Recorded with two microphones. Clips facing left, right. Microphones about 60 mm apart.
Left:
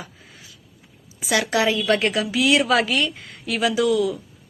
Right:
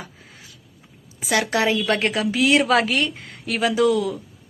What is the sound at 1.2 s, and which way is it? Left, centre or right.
A woman's voice, right.